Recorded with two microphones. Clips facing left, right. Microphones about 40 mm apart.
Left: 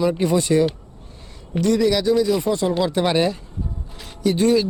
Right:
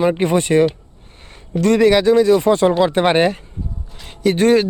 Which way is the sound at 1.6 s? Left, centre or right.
Right.